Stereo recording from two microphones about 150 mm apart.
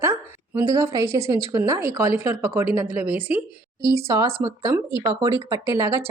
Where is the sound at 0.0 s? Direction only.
20° right (ahead or behind).